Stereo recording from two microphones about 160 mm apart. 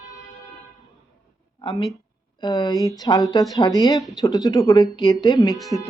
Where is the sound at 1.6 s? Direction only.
35° left (ahead or behind).